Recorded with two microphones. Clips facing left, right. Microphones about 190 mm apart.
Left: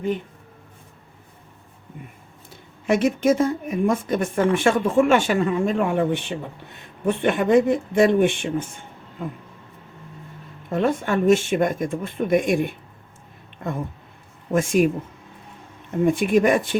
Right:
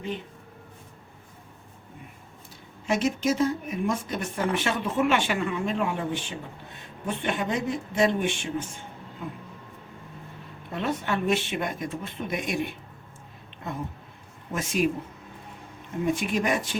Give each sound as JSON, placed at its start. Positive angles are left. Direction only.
{"t": 2.8, "sound": "speech", "side_deg": 55}
{"t": 10.7, "sound": "speech", "side_deg": 50}
{"t": 14.5, "sound": "speech", "side_deg": 50}
{"t": 16.0, "sound": "speech", "side_deg": 50}